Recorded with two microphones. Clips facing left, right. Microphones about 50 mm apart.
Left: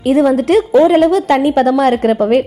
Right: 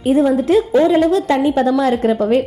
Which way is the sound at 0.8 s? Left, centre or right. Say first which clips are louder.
Left 3 dB; left.